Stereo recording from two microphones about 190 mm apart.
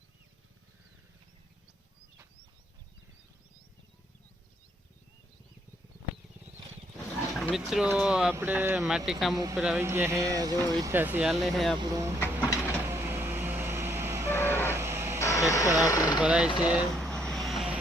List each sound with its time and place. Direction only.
7.3 s speech: centre (ahead or behind)
11.8 s speech: 15° right (ahead or behind)
12.2 s a sound: 10° left (ahead or behind)
12.9 s vehicle: 15° right (ahead or behind)
14.7 s livestock: 15° right (ahead or behind)
15.2 s a sound: 15° left (ahead or behind)
16.2 s speech: 5° right (ahead or behind)
16.6 s vehicle: centre (ahead or behind)